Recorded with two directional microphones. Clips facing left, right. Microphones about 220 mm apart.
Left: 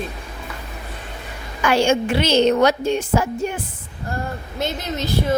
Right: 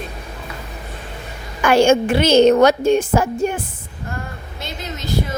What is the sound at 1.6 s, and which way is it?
A woman's voice, 50° right (ahead or behind).